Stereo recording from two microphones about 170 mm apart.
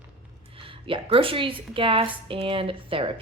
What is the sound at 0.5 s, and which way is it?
Speech, 30° right (ahead or behind).